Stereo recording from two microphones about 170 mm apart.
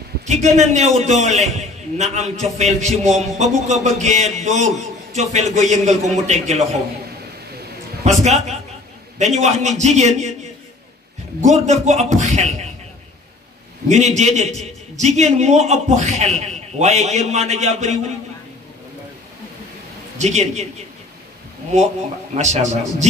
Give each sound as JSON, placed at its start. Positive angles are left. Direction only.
{"t": 0.3, "sound": "a man's voice", "side_deg": -40}
{"t": 8.0, "sound": "a man's voice", "side_deg": -40}
{"t": 11.4, "sound": "a man's voice", "side_deg": -45}
{"t": 13.8, "sound": "a man's voice", "side_deg": -40}
{"t": 20.2, "sound": "a man's voice", "side_deg": -40}
{"t": 22.3, "sound": "a man's voice", "side_deg": -40}